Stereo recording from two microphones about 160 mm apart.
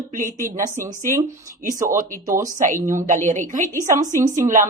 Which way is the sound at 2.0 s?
60° right (ahead or behind).